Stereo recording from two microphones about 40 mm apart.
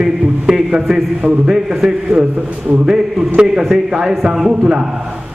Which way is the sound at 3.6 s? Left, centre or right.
Centre.